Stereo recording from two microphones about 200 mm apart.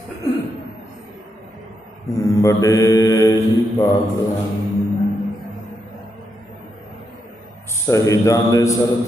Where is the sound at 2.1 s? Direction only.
15° left (ahead or behind).